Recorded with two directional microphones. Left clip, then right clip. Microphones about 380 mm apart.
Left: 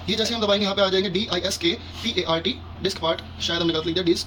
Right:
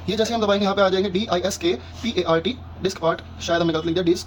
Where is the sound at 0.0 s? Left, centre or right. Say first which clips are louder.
Right 2 dB; right.